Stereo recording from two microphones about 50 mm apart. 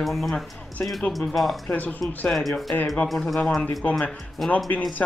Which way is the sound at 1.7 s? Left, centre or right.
Left.